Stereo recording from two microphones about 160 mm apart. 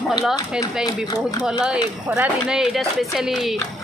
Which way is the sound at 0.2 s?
5° right (ahead or behind).